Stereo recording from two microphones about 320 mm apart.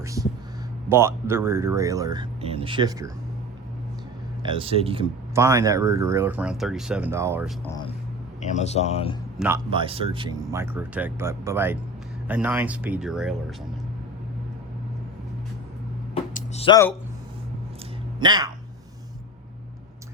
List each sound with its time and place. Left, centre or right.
0.0 s a sound: centre
0.9 s speech: centre
4.4 s speech: centre
7.6 s speech: centre
9.6 s speech: centre
16.3 s a sound: centre
18.2 s speech: centre